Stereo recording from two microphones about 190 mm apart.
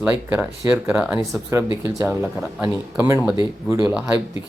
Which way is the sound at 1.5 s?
15° right (ahead or behind).